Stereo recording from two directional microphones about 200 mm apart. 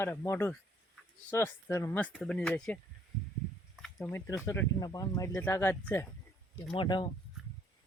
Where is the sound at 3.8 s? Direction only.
10° left (ahead or behind).